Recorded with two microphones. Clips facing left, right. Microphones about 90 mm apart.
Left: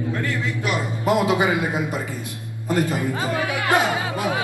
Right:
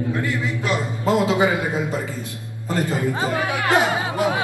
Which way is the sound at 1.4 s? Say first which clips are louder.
Right 1 dB; 20° left (ahead or behind).